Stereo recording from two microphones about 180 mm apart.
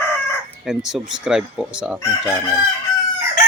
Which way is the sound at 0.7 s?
5° right (ahead or behind).